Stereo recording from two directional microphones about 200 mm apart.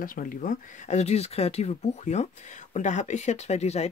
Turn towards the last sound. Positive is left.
turn(degrees=35)  # may be behind; listen again after turning